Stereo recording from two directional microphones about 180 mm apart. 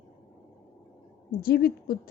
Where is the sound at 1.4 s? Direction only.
55° left (ahead or behind).